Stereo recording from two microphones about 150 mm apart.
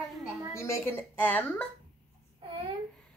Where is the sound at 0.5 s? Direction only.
15° left (ahead or behind).